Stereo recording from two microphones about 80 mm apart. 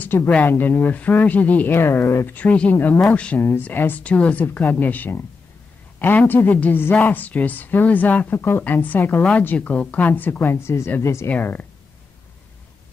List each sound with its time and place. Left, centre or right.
0.0 s a sound: left
0.3 s speech: left
1.8 s speech: left
2.2 s speech: centre
3.3 s speech: left
11.2 s speech: centre